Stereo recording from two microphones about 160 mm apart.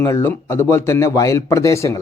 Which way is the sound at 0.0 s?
20° left (ahead or behind).